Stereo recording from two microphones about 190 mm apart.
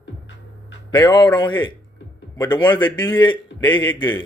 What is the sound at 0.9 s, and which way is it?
A man's voice, 25° left (ahead or behind).